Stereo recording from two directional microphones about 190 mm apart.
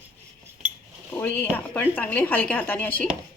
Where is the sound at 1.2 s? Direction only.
10° left (ahead or behind).